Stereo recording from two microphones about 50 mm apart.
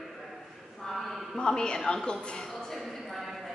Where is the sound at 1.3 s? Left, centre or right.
Centre.